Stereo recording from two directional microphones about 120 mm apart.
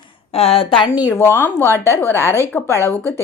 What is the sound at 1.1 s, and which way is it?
Speech, 20° left (ahead or behind).